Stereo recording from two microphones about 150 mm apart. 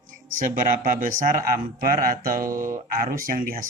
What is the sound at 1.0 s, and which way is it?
Speech, 65° right (ahead or behind).